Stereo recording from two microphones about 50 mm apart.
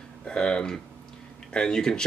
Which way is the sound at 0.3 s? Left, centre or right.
Centre.